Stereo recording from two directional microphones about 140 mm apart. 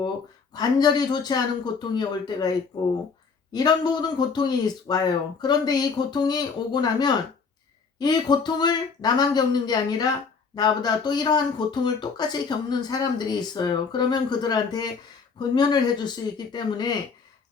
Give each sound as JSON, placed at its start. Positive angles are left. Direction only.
{"t": 0.5, "sound": "speech", "side_deg": 30}